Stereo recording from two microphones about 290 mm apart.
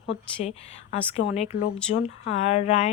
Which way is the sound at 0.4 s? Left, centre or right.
Left.